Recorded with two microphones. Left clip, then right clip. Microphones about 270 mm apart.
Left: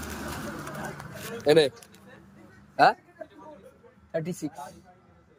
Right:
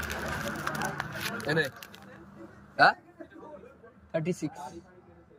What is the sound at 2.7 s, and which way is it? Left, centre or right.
Speech, centre.